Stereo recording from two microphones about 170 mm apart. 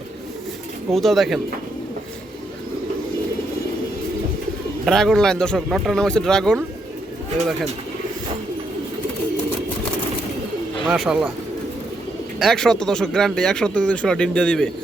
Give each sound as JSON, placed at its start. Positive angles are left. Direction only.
{"t": 0.9, "sound": "speech", "side_deg": 0}
{"t": 4.9, "sound": "speech", "side_deg": 0}
{"t": 10.8, "sound": "speech", "side_deg": 0}
{"t": 12.4, "sound": "speech", "side_deg": 0}